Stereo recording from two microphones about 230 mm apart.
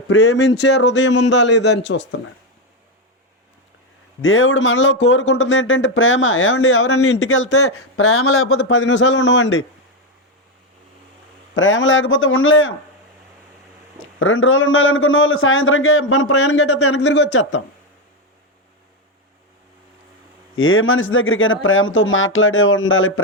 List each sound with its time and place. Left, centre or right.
0.1 s speech: left
0.3 s speech: left
4.2 s speech: left
11.5 s speech: left
14.2 s speech: left
20.6 s speech: left